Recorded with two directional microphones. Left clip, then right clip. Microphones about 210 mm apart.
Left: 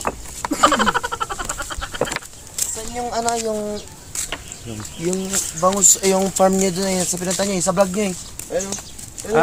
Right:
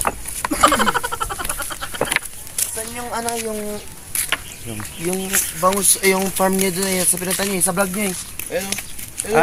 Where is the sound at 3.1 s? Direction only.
30° left (ahead or behind).